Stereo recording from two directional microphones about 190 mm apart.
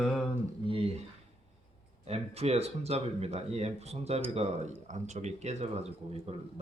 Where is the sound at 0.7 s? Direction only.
30° right (ahead or behind).